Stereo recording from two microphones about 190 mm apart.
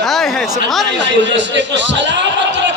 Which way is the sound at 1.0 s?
70° right (ahead or behind).